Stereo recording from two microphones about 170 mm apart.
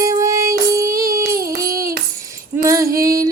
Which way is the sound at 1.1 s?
60° right (ahead or behind).